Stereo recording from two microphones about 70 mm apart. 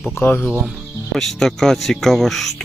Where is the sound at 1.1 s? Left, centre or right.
Centre.